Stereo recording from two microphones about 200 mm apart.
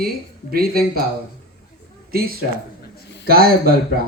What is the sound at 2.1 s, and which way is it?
Speech, 50° right (ahead or behind).